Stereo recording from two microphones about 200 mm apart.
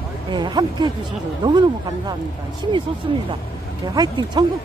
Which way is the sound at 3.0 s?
20° right (ahead or behind).